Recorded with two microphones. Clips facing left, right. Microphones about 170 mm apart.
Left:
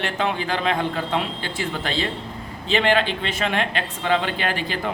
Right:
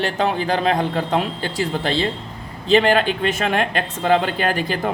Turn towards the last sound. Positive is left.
turn(degrees=-45)  # may be behind; listen again after turning